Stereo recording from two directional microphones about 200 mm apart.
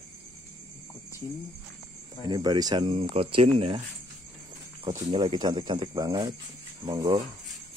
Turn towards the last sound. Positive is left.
turn(degrees=-20)  # may be behind; listen again after turning